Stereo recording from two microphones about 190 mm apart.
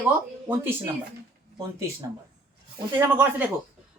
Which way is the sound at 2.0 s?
20° right (ahead or behind).